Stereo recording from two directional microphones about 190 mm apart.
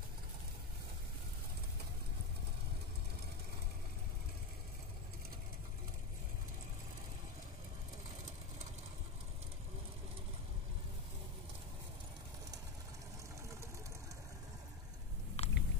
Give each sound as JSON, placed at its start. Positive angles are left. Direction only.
{"t": 15.4, "sound": "chewing", "side_deg": 30}